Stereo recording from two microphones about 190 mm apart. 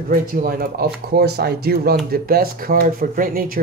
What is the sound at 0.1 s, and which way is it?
A man's voice, 50° right (ahead or behind).